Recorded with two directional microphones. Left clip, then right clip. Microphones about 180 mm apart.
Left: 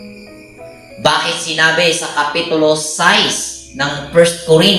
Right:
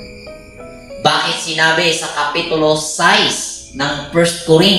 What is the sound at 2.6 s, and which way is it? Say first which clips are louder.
Music: left 1 dB; 30° left (ahead or behind).